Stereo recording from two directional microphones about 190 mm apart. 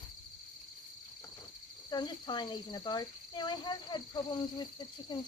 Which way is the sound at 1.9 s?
20° left (ahead or behind).